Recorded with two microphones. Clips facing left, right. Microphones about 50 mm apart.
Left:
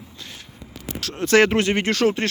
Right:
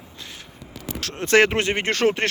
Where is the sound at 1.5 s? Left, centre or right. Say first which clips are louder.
Left 2 dB; right.